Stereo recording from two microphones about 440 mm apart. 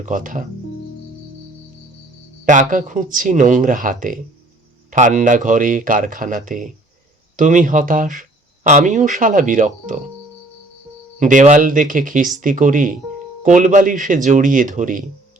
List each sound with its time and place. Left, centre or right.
0.0 s speech: centre
2.4 s speech: centre
11.2 s speech: centre